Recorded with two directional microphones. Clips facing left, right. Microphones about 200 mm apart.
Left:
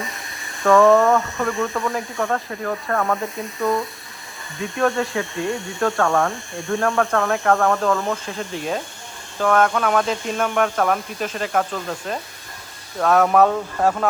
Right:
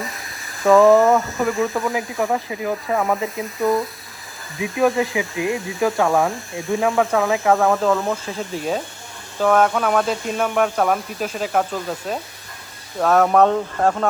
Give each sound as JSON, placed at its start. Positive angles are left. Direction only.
{"t": 0.0, "sound": "speech", "side_deg": 0}